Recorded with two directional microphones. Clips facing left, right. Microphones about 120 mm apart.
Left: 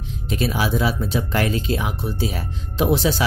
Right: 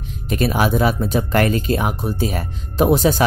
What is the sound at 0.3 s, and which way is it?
Speech, 50° right (ahead or behind).